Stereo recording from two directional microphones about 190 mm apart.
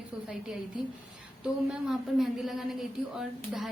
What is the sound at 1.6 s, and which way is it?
A woman's voice, centre (ahead or behind).